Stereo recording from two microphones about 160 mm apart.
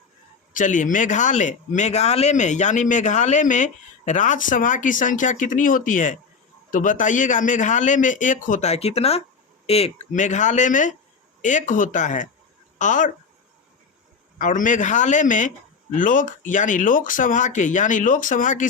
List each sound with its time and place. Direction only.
0.5 s speech: 50° left (ahead or behind)
14.3 s speech: 55° left (ahead or behind)